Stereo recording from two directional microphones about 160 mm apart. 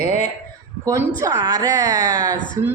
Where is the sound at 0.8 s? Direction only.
20° right (ahead or behind).